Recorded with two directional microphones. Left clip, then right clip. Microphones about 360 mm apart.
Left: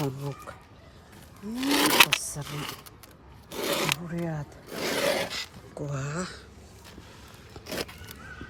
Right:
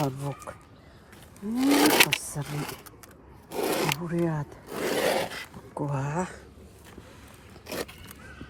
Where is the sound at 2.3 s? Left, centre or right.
Centre.